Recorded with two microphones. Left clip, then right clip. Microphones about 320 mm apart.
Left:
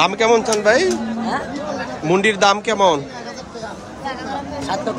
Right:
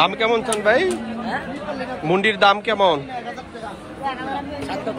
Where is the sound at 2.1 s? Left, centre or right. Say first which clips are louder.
Left 1 dB; centre.